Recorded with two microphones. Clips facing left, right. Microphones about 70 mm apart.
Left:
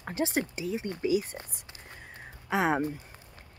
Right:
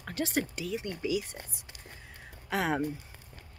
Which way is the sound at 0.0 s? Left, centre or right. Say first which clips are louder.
Left 2 dB; left.